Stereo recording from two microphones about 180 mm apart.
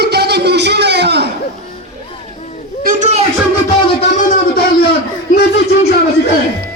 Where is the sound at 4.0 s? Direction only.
45° left (ahead or behind).